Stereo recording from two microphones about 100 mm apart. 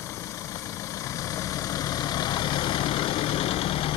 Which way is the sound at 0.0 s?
30° left (ahead or behind).